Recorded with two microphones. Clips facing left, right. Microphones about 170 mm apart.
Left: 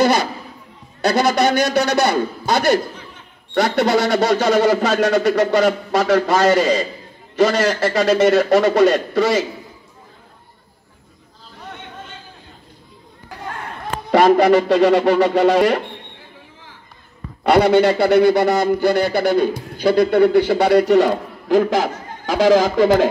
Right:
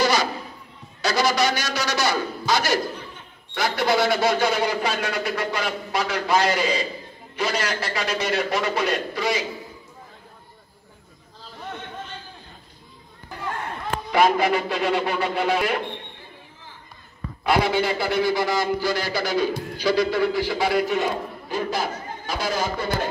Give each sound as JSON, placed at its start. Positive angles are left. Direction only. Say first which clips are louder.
{"t": 0.0, "sound": "a sound", "louder": "left 5 dB", "side_deg": 60}
{"t": 1.0, "sound": "a man's voice", "louder": "left 6 dB", "side_deg": 60}
{"t": 14.1, "sound": "a man's voice", "louder": "left 8 dB", "side_deg": 80}
{"t": 17.4, "sound": "speech", "louder": "left 8 dB", "side_deg": 70}